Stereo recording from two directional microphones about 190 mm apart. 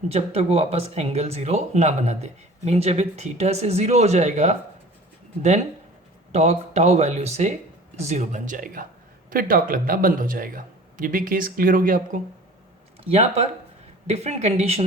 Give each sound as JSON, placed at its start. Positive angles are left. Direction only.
{"t": 0.1, "sound": "speech", "side_deg": -35}
{"t": 13.1, "sound": "speech", "side_deg": -30}